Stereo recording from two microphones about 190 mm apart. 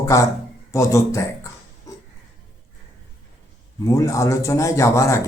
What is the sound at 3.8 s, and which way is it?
Speech, 15° left (ahead or behind).